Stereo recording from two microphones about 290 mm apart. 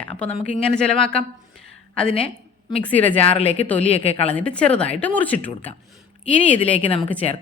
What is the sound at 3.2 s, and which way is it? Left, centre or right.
Speech, centre.